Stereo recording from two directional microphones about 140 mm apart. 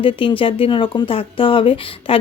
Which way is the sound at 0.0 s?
40° left (ahead or behind).